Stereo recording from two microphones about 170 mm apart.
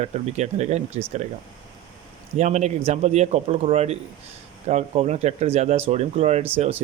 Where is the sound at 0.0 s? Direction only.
40° right (ahead or behind).